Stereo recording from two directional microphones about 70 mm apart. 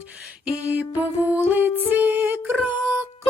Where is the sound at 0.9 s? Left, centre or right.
Right.